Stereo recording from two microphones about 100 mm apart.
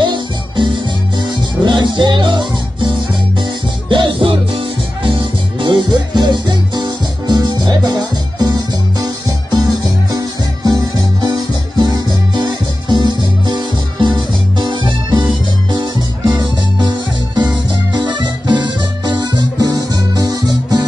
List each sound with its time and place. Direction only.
0.0 s music: 55° right (ahead or behind)
17.9 s music: 50° right (ahead or behind)